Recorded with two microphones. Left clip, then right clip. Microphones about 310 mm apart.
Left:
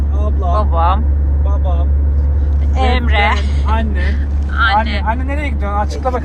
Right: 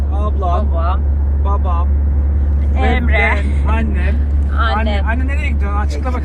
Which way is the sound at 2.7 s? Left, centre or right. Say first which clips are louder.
Left 1 dB; centre.